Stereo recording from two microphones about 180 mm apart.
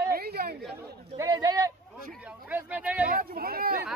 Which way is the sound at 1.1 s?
20° right (ahead or behind).